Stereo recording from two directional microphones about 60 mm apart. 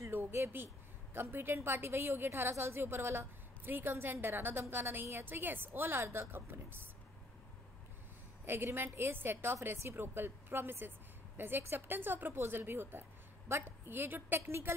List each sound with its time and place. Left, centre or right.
0.0 s a woman's voice: right
8.7 s a woman's voice: right